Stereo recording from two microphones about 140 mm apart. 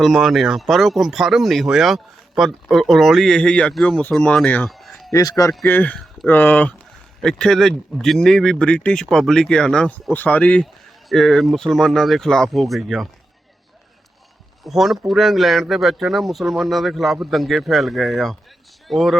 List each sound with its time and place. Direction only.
0.0 s speech: centre (ahead or behind)
4.7 s a sound: centre (ahead or behind)
5.1 s speech: 25° left (ahead or behind)
5.6 s speech: 10° left (ahead or behind)
14.6 s speech: centre (ahead or behind)